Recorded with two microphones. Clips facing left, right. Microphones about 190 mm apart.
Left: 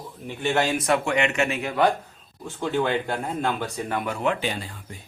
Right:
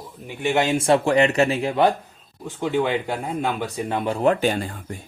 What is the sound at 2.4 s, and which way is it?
Speech, 15° right (ahead or behind).